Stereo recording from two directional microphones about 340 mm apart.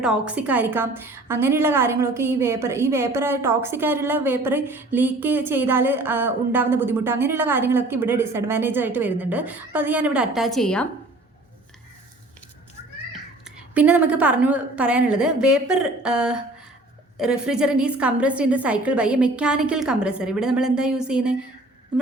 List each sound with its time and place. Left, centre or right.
0.0 s a woman's voice: centre
13.1 s a woman's voice: centre